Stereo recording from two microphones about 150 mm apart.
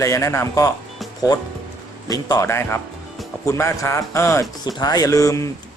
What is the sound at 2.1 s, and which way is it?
Speech, 25° left (ahead or behind).